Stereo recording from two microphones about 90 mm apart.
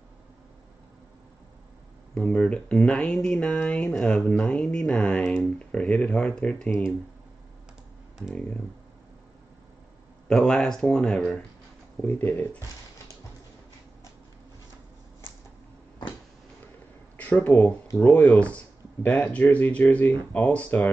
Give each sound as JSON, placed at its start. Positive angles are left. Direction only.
{"t": 2.1, "sound": "speech", "side_deg": 10}
{"t": 10.2, "sound": "speech", "side_deg": 5}
{"t": 12.0, "sound": "speech", "side_deg": 20}
{"t": 17.2, "sound": "speech", "side_deg": 15}